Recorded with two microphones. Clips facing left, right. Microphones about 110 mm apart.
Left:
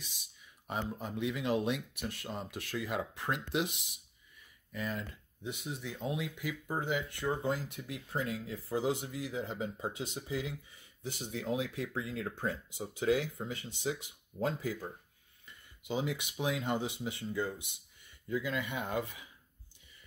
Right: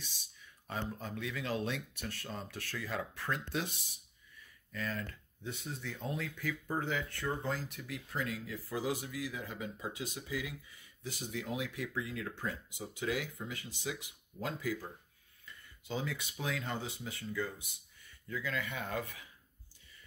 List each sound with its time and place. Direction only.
0.7 s speech: 15° left (ahead or behind)
4.7 s speech: 15° left (ahead or behind)